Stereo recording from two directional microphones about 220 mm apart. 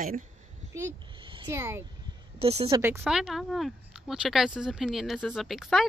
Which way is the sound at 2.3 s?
25° right (ahead or behind).